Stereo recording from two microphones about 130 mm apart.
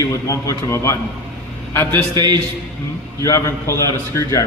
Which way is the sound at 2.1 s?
35° right (ahead or behind).